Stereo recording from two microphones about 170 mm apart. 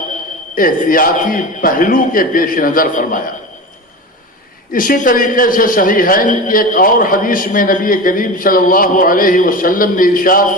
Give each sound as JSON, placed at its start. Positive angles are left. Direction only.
{"t": 0.5, "sound": "a man's voice", "side_deg": 55}
{"t": 4.7, "sound": "a man's voice", "side_deg": 55}